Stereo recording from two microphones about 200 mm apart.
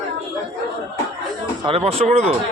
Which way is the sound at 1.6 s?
30° right (ahead or behind).